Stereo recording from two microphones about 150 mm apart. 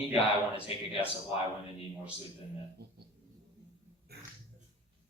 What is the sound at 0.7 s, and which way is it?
Speech, 40° left (ahead or behind).